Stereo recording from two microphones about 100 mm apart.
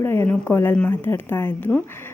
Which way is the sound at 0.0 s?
25° left (ahead or behind).